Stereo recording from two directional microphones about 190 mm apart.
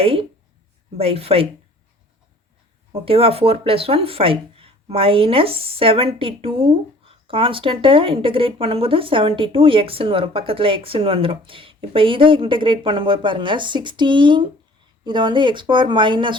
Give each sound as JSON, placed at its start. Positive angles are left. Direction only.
{"t": 0.0, "sound": "speech", "side_deg": -30}
{"t": 2.9, "sound": "speech", "side_deg": -30}